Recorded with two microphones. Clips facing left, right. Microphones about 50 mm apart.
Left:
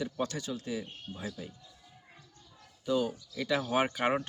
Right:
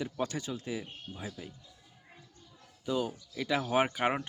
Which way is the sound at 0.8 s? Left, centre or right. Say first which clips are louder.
Left 2 dB; centre.